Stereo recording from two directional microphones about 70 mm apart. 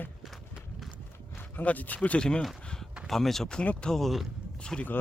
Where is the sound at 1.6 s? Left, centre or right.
Left.